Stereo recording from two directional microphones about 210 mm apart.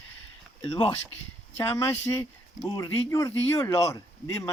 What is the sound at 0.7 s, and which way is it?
Speech, 15° left (ahead or behind).